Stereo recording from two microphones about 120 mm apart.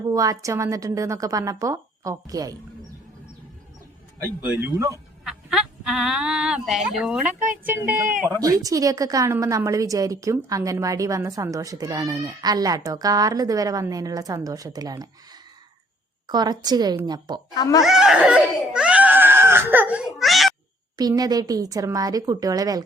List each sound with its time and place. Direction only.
0.1 s a woman's voice: 25° right (ahead or behind)
4.4 s speech: 15° right (ahead or behind)
7.6 s a woman's voice: 15° right (ahead or behind); by 15.0 s 30° right (ahead or behind)
16.2 s a woman's voice: 35° right (ahead or behind)
17.5 s speech: 30° left (ahead or behind)
17.8 s speech: 5° right (ahead or behind)
21.0 s a woman's voice: 30° right (ahead or behind)